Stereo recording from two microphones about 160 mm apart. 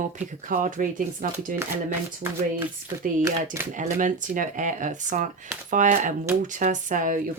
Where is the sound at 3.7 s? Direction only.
55° right (ahead or behind).